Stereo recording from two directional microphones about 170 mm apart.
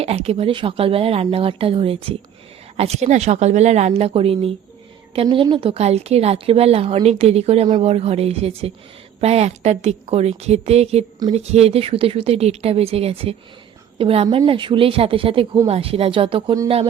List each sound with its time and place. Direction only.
0.0 s a woman's voice: 35° right (ahead or behind)